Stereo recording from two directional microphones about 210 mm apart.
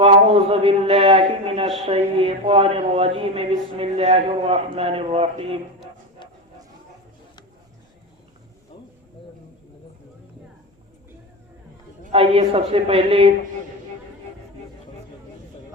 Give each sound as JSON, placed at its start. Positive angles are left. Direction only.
{"t": 0.0, "sound": "speech", "side_deg": -25}
{"t": 12.1, "sound": "speech", "side_deg": -25}